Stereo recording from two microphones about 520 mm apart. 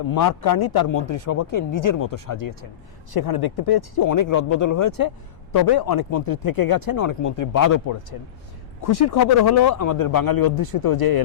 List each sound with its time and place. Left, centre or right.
0.1 s speech: left
9.1 s speech: left